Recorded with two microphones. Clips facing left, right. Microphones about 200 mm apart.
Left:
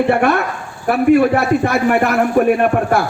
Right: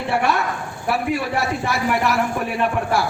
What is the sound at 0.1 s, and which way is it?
A man's voice, 55° left (ahead or behind).